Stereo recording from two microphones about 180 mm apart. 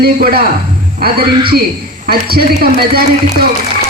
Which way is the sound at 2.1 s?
60° right (ahead or behind).